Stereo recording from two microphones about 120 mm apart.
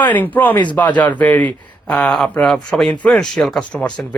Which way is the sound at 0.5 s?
40° left (ahead or behind).